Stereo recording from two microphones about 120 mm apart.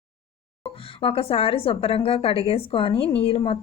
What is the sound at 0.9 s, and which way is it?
A woman's voice, 50° left (ahead or behind).